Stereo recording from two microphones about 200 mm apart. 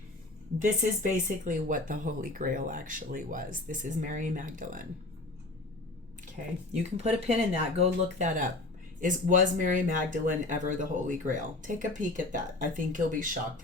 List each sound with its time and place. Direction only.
0.8 s speech: 40° right (ahead or behind)
6.9 s speech: 30° right (ahead or behind)